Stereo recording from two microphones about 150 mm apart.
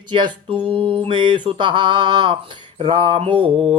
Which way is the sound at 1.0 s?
35° right (ahead or behind).